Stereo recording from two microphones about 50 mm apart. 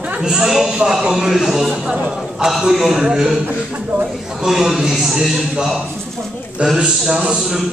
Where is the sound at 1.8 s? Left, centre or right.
Centre.